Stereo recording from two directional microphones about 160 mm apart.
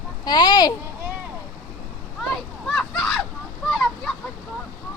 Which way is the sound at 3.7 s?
5° left (ahead or behind).